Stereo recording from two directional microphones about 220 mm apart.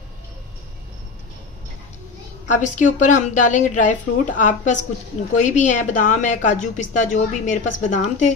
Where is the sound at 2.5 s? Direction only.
35° left (ahead or behind).